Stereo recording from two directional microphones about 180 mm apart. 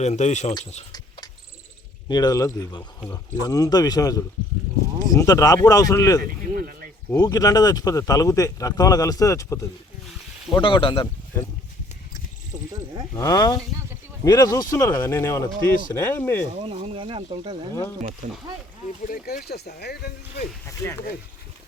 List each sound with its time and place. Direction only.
0.0 s speech: 40° left (ahead or behind)
2.0 s speech: 20° left (ahead or behind)
6.2 s a sound: 50° right (ahead or behind)
7.1 s speech: 20° left (ahead or behind)
10.5 s speech: 25° left (ahead or behind)
13.1 s speech: 20° left (ahead or behind)
16.6 s speech: 30° right (ahead or behind)
19.0 s speech: 55° left (ahead or behind)